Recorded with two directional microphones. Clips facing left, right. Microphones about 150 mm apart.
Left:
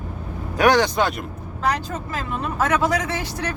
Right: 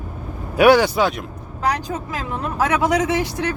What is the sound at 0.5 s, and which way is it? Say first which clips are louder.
Speech: right 4 dB; 10° right (ahead or behind).